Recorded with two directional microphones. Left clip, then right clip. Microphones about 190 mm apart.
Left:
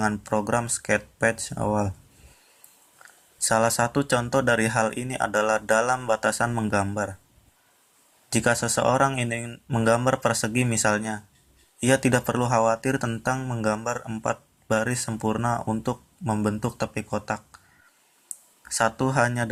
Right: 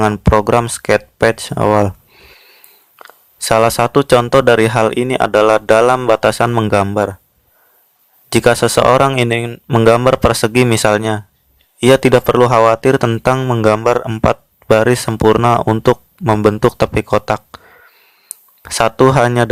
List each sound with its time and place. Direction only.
0.0 s speech: 40° right (ahead or behind)
3.0 s speech: 40° right (ahead or behind)
8.3 s speech: 40° right (ahead or behind)